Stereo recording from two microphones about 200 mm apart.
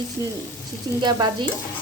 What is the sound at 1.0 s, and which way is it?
Speech, 20° right (ahead or behind).